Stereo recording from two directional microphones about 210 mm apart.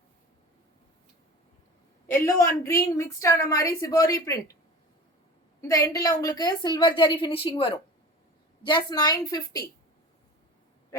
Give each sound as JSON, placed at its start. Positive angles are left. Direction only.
{"t": 2.0, "sound": "a woman's voice", "side_deg": 15}
{"t": 5.6, "sound": "a woman's voice", "side_deg": 15}